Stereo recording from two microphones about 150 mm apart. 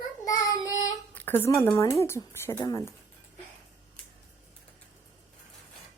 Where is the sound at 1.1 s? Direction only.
15° left (ahead or behind).